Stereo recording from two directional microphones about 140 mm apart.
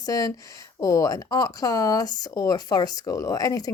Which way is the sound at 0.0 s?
25° left (ahead or behind).